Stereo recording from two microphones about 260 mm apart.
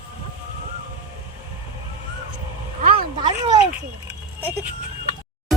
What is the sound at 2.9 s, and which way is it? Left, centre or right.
Speech, centre.